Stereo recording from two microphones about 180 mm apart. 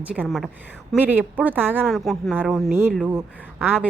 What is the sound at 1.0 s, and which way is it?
Speech, 10° right (ahead or behind).